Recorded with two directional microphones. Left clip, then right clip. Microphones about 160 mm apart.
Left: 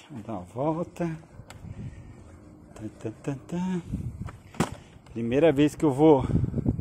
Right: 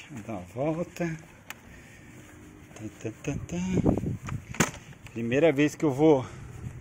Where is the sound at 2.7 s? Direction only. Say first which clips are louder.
Left 1 dB; 10° left (ahead or behind).